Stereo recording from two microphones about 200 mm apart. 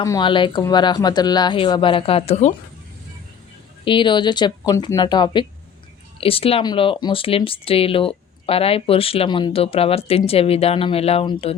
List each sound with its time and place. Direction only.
0.0 s speech: 20° left (ahead or behind)
3.8 s speech: 25° left (ahead or behind)